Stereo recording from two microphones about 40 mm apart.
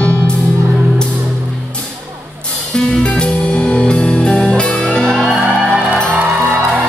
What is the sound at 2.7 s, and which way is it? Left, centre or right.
Music, left.